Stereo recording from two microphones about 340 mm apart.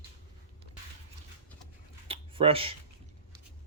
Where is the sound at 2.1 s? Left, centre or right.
Centre.